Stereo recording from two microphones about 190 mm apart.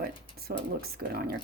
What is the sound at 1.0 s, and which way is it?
Speech, 55° right (ahead or behind).